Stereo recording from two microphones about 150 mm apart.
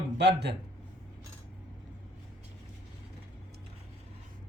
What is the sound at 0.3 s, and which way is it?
Speech, 90° right.